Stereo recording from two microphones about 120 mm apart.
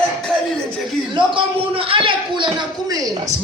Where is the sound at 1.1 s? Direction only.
45° right (ahead or behind).